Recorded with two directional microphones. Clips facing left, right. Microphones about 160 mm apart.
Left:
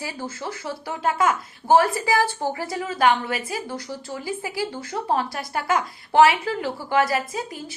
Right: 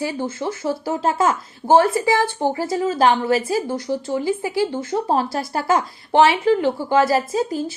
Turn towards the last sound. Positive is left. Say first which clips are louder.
# right 7 dB
turn(degrees=-30)  # may be behind; listen again after turning